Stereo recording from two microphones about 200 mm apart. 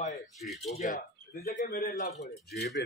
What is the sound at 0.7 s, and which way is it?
Speech, 40° left (ahead or behind).